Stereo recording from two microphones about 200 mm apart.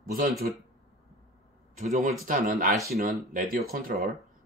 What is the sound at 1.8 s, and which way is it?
Speech, 35° right (ahead or behind).